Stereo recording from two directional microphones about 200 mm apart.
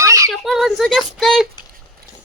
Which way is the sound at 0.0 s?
15° right (ahead or behind).